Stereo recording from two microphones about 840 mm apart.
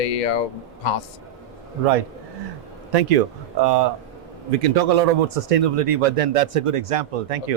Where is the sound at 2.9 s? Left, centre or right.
Right.